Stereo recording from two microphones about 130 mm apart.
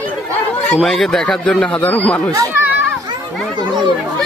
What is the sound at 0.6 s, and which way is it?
Speech, 5° left (ahead or behind).